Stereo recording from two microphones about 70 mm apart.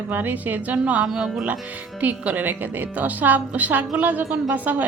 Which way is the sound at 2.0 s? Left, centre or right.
Right.